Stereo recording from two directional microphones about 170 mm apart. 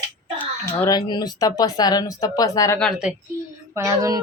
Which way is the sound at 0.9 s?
25° left (ahead or behind).